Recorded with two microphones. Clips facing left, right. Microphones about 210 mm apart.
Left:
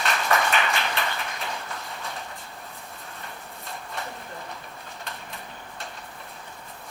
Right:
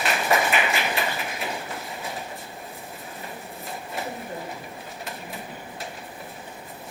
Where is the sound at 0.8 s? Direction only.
10° right (ahead or behind).